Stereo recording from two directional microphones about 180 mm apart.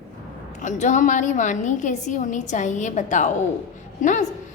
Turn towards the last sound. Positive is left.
turn(degrees=45)  # may be behind; listen again after turning